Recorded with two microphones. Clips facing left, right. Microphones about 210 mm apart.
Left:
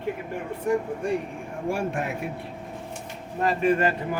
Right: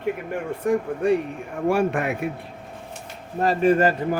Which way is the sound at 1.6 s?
70° right (ahead or behind).